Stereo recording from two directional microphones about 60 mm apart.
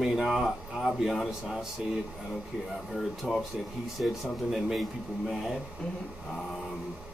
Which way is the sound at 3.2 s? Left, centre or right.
Centre.